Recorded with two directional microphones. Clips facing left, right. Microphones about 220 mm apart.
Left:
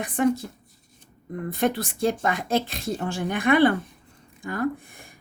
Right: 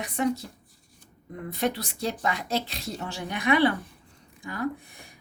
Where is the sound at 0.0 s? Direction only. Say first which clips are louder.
Left 4 dB; 50° left (ahead or behind).